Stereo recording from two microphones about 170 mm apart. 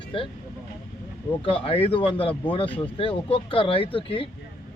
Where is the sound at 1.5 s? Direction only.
35° left (ahead or behind).